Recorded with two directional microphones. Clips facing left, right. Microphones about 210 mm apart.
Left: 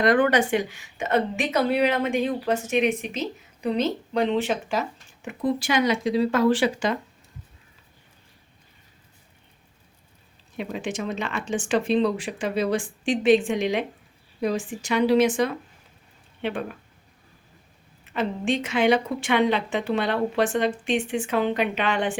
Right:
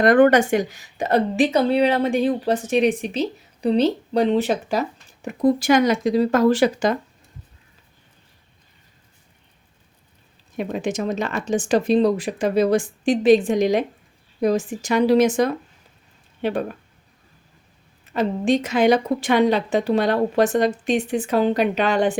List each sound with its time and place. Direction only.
0.0 s a woman's voice: 50° right (ahead or behind)
10.6 s a woman's voice: 45° right (ahead or behind)
18.1 s a woman's voice: 40° right (ahead or behind)